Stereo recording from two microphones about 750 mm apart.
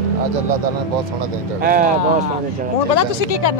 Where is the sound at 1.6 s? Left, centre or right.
Centre.